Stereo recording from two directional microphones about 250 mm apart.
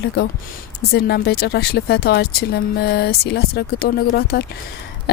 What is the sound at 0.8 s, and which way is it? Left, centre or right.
Speech, left.